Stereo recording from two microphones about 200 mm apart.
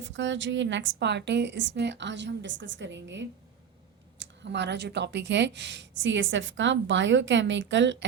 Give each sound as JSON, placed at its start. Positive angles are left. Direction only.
{"t": 0.0, "sound": "speech", "side_deg": -65}